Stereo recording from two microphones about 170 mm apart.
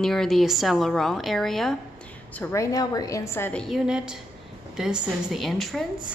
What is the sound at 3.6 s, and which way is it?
A woman's voice, centre (ahead or behind).